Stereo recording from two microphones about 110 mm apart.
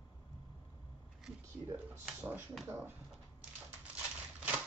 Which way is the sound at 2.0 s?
15° right (ahead or behind).